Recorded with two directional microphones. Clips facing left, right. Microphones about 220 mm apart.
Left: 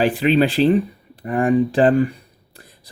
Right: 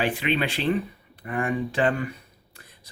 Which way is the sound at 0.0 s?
35° left (ahead or behind).